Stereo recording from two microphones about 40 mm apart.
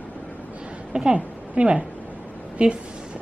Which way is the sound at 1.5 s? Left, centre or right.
Right.